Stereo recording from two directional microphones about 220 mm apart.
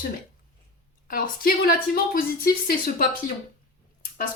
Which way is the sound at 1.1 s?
40° left (ahead or behind).